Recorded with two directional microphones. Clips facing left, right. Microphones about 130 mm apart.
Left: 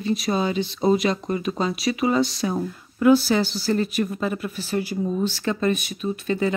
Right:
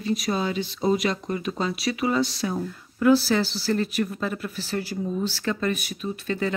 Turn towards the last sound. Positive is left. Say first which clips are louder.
# left 4 dB
turn(degrees=15)  # may be behind; listen again after turning